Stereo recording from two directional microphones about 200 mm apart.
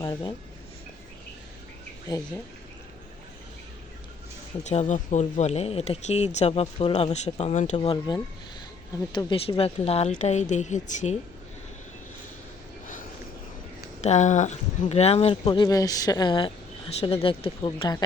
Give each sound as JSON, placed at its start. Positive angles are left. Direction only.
{"t": 0.0, "sound": "speech", "side_deg": 20}
{"t": 4.6, "sound": "speech", "side_deg": 35}
{"t": 14.0, "sound": "speech", "side_deg": 35}